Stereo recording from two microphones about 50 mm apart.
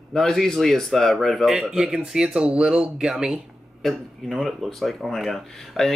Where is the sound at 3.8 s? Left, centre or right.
Centre.